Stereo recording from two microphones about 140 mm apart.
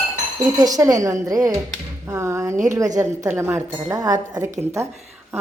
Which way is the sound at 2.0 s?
20° right (ahead or behind).